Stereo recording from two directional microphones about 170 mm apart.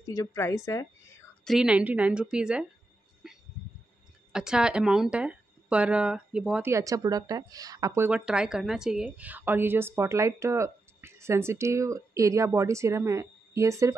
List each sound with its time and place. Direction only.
0.0 s a woman's voice: 20° left (ahead or behind)
1.4 s a woman's voice: centre (ahead or behind)
3.2 s a sound: 5° right (ahead or behind)
4.3 s speech: 5° right (ahead or behind)
6.7 s speech: 20° right (ahead or behind)
8.1 s a woman's voice: 5° right (ahead or behind)